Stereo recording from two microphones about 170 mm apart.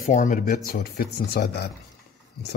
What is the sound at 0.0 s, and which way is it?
Speech, 50° left (ahead or behind).